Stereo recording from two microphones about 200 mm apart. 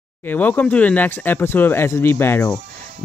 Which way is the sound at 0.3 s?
10° left (ahead or behind).